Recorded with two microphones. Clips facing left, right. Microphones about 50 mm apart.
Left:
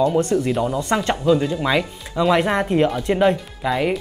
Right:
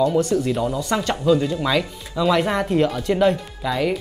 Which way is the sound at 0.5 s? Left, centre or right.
Centre.